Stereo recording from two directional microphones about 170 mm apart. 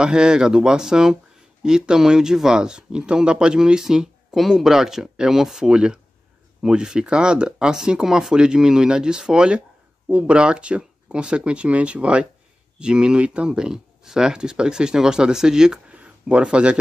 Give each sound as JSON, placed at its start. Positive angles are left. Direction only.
{"t": 0.0, "sound": "speech", "side_deg": -5}